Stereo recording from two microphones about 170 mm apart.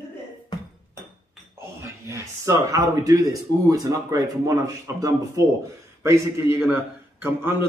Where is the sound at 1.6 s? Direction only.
15° right (ahead or behind).